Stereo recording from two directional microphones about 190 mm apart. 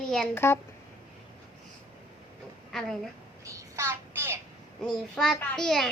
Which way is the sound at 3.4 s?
15° right (ahead or behind).